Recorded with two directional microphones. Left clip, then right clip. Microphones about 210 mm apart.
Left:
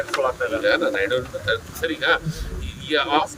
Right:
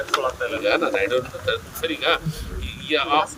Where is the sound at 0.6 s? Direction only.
Centre (ahead or behind).